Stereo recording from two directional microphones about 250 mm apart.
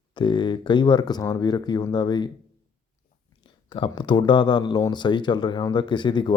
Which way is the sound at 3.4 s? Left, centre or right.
Centre.